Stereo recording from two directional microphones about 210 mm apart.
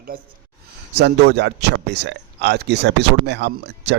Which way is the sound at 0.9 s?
55° right (ahead or behind).